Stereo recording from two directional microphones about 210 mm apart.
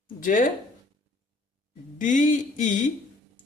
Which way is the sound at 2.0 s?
40° left (ahead or behind).